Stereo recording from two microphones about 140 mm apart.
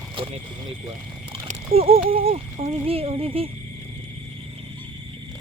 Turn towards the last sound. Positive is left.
turn(degrees=-40)  # may be behind; listen again after turning